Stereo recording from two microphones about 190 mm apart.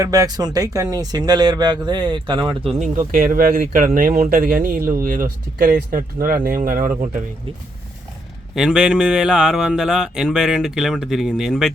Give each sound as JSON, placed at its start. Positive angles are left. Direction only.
{"t": 0.0, "sound": "speech", "side_deg": -20}
{"t": 3.1, "sound": "speech", "side_deg": -45}
{"t": 8.5, "sound": "a man's voice", "side_deg": -5}